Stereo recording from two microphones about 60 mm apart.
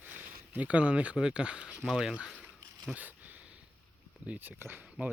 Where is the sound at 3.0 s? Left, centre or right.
Right.